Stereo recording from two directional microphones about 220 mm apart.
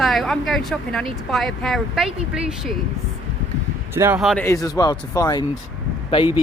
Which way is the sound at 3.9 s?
10° right (ahead or behind).